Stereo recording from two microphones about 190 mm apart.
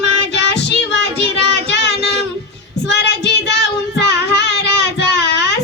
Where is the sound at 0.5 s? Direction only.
65° left (ahead or behind).